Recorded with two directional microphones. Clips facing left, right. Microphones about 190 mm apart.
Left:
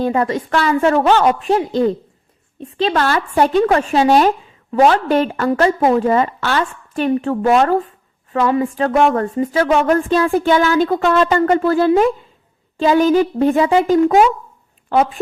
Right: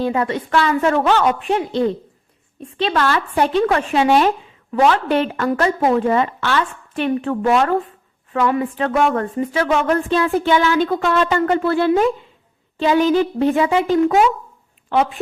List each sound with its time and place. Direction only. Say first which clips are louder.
0.0 s a woman's voice: left 2 dB; 40° left (ahead or behind)